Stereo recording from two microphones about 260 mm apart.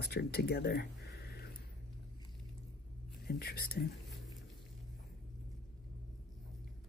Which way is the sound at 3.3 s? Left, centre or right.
Left.